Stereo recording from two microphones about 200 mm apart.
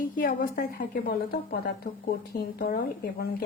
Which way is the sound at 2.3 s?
50° left (ahead or behind).